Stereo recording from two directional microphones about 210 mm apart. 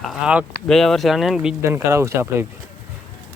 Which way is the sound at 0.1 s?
5° right (ahead or behind).